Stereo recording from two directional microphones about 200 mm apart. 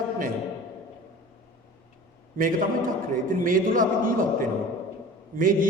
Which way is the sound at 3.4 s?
45° right (ahead or behind).